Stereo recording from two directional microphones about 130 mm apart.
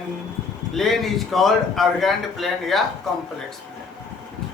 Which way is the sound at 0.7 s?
Centre (ahead or behind).